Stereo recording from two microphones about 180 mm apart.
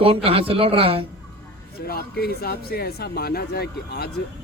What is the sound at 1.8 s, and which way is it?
Speech, 60° left (ahead or behind).